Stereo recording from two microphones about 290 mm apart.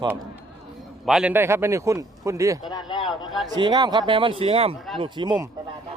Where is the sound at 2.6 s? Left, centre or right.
Centre.